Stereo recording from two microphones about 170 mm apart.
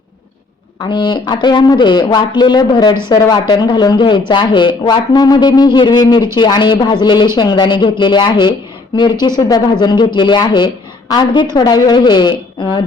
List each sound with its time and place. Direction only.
0.8 s speech: 25° left (ahead or behind)